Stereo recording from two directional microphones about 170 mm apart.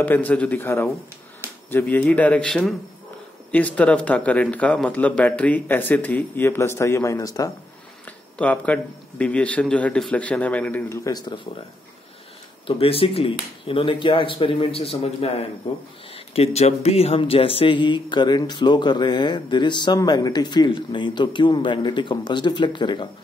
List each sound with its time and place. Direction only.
0.0 s speech: 10° left (ahead or behind)
8.4 s speech: 10° left (ahead or behind)
11.1 s speech: 25° left (ahead or behind)
12.6 s speech: 35° left (ahead or behind)